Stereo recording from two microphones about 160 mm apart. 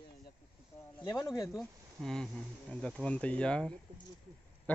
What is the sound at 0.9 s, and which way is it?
Speech, 25° left (ahead or behind).